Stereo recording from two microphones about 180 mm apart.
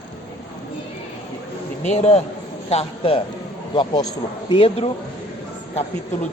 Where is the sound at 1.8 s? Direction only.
40° left (ahead or behind).